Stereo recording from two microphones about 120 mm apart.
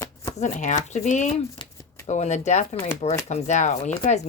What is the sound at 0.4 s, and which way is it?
Speech, 80° left.